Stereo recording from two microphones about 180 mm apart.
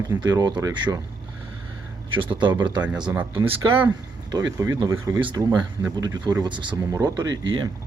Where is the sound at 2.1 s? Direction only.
25° right (ahead or behind).